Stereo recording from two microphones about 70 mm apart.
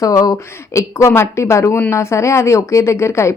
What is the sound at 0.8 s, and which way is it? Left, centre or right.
A woman's voice, left.